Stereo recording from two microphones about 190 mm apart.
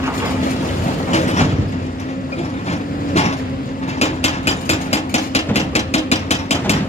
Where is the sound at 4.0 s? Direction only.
35° left (ahead or behind).